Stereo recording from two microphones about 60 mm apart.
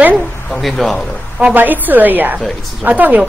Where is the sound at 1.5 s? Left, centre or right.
Right.